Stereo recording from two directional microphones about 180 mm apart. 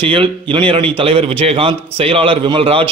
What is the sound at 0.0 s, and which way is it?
A man's voice, 30° right (ahead or behind).